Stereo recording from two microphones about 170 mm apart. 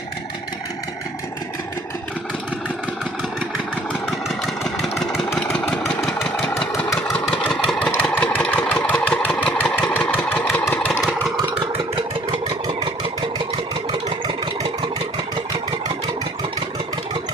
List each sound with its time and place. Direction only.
4.0 s vehicle: centre (ahead or behind)
5.5 s engine: 10° left (ahead or behind)
7.1 s engine: centre (ahead or behind)
12.5 s vehicle: 25° right (ahead or behind)